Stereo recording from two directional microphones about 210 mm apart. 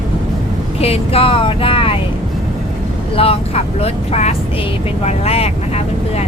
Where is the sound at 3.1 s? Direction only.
25° left (ahead or behind).